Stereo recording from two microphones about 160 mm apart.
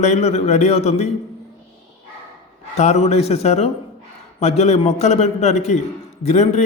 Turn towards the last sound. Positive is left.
turn(degrees=45)  # may be behind; listen again after turning